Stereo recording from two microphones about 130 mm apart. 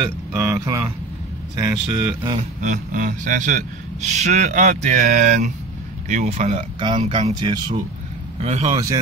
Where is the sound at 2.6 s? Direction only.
75° right (ahead or behind).